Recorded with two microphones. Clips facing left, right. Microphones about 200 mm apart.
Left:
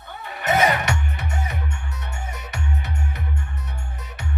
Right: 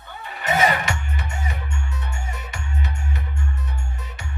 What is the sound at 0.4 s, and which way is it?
Music, 65° left (ahead or behind).